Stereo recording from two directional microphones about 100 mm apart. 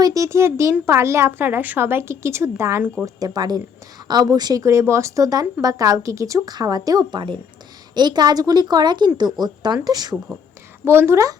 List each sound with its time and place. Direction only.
0.0 s a child's voice: 35° right (ahead or behind)
3.0 s a woman's voice: 40° right (ahead or behind)
10.8 s a child's voice: 25° right (ahead or behind)